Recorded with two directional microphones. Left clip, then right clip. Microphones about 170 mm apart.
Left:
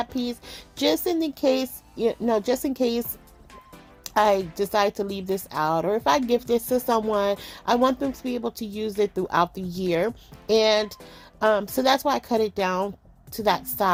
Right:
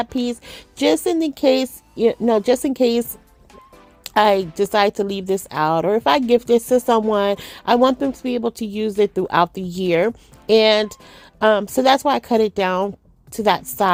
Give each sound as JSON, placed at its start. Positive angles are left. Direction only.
{"t": 0.0, "sound": "speech", "side_deg": -40}
{"t": 11.1, "sound": "a sound", "side_deg": -40}
{"t": 11.7, "sound": "speech", "side_deg": -40}